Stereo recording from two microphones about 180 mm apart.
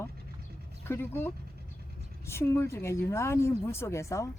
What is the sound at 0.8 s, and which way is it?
Speech, 15° left (ahead or behind).